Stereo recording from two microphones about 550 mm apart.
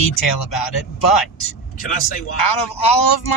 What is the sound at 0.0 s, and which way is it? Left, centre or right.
Speech, left.